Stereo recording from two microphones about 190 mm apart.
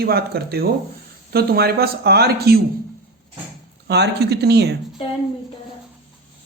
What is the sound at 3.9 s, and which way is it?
Speech, 60° right (ahead or behind).